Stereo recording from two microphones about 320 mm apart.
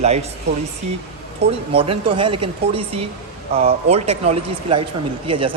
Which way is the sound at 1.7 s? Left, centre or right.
Centre.